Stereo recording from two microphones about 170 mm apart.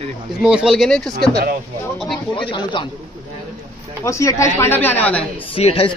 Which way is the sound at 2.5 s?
30° left (ahead or behind).